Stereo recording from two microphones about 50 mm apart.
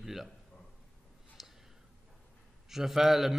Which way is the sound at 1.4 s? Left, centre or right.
Centre.